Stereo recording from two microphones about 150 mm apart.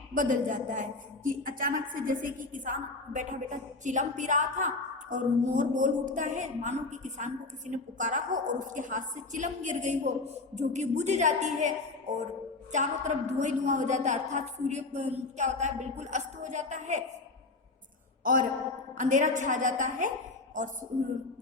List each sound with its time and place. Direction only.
0.1 s a woman's voice: 60° right (ahead or behind)
18.2 s a sound: 65° right (ahead or behind)
18.9 s a woman's voice: 55° right (ahead or behind)